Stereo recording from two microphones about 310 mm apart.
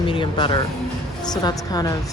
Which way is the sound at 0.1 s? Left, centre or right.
Centre.